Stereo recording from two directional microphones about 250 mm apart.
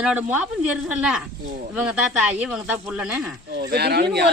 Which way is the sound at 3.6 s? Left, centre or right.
Right.